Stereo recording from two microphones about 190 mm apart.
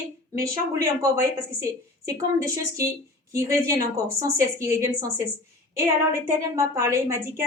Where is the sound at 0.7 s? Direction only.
15° right (ahead or behind).